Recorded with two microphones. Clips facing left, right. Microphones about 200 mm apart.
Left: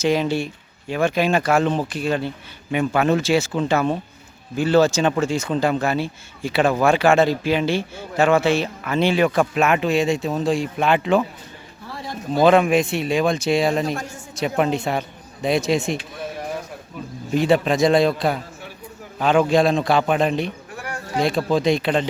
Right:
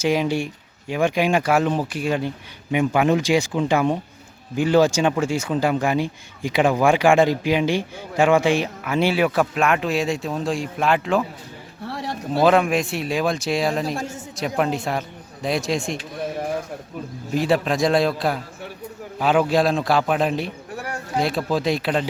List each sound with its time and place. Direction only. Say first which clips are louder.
0.0 s speech: left 1 dB; 10° right (ahead or behind)
11.9 s a sound: right 4 dB; 70° right (ahead or behind)
12.4 s speech: left 2 dB; centre (ahead or behind)
13.9 s a man's voice: right 1 dB; 25° right (ahead or behind)
14.3 s speech: left 2 dB; centre (ahead or behind)
17.3 s speech: left 3 dB; centre (ahead or behind)